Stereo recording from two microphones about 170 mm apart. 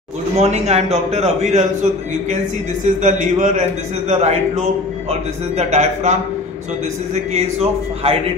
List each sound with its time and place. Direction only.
0.4 s a man's voice: 40° right (ahead or behind)
2.8 s a man's voice: 45° right (ahead or behind)
7.3 s a man's voice: 35° right (ahead or behind)